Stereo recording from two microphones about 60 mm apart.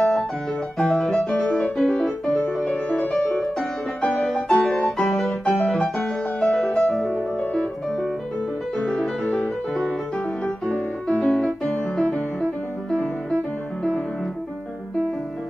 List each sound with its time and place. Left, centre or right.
0.0 s piano: centre
0.7 s music: centre
1.3 s music: centre
2.9 s music: left
3.3 s music: centre
6.4 s music: centre
6.7 s music: centre
11.1 s music: centre
12.9 s music: centre